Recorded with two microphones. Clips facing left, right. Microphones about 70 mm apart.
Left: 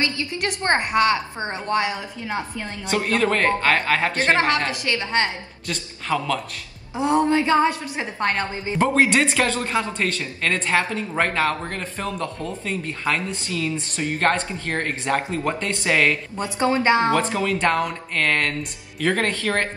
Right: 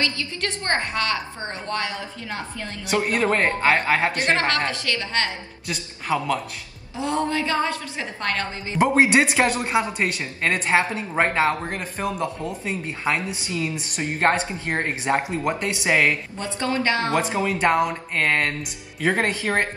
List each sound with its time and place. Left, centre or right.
0.0 s a woman's voice: left
2.9 s speech: centre
4.3 s a woman's voice: left
5.7 s speech: centre
7.0 s a woman's voice: left
8.7 s speech: centre
16.5 s a woman's voice: left
17.1 s speech: right